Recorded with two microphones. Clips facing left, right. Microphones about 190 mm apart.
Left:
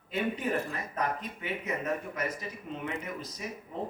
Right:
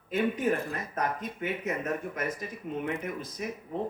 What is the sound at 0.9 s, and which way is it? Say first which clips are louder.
Speech: right 1 dB; 50° right (ahead or behind).